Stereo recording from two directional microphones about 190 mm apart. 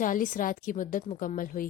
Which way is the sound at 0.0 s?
45° left (ahead or behind).